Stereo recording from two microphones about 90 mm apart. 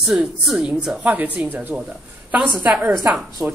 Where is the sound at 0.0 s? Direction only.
5° right (ahead or behind).